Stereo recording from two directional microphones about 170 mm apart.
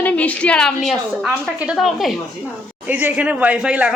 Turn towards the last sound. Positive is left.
turn(degrees=-5)  # may be behind; listen again after turning